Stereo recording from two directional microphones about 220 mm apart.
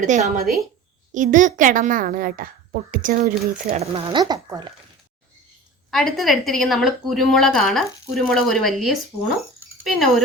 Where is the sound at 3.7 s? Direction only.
25° right (ahead or behind).